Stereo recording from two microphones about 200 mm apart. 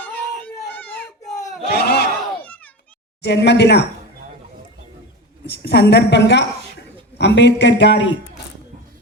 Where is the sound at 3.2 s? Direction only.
60° left (ahead or behind).